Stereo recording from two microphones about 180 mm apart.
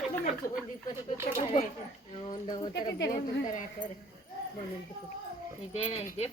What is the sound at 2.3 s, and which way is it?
Speech, 25° left (ahead or behind).